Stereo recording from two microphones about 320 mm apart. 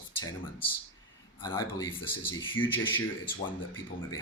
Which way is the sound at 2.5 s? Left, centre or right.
Left.